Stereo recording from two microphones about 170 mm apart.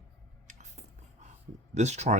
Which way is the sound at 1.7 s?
40° right (ahead or behind).